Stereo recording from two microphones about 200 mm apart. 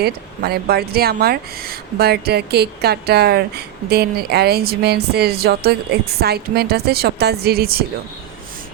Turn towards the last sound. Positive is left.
turn(degrees=-50)  # may be behind; listen again after turning